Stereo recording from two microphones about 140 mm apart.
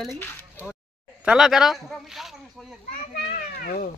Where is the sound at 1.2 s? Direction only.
5° right (ahead or behind).